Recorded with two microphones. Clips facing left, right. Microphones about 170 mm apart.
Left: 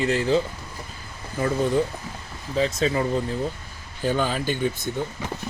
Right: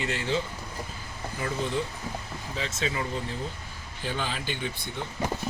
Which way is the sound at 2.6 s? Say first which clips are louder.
Left 10 dB; 40° left (ahead or behind).